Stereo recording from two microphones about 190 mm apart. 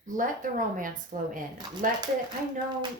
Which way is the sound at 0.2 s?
45° right (ahead or behind).